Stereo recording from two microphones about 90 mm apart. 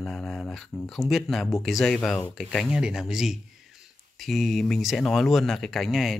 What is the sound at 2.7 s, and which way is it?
Speech, 5° right (ahead or behind).